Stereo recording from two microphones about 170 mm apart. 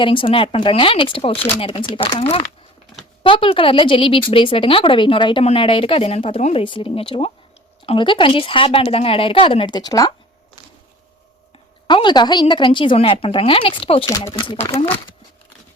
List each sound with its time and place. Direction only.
0.0 s speech: 30° left (ahead or behind)
11.9 s a woman's voice: 25° left (ahead or behind)